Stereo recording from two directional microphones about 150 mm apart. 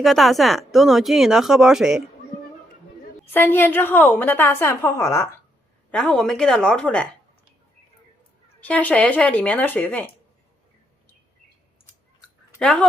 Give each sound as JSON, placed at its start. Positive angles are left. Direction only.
{"t": 0.0, "sound": "speech", "side_deg": 0}
{"t": 3.3, "sound": "a woman's voice", "side_deg": 15}
{"t": 5.9, "sound": "speech", "side_deg": 5}
{"t": 8.6, "sound": "a woman's voice", "side_deg": 10}
{"t": 12.5, "sound": "speech", "side_deg": 5}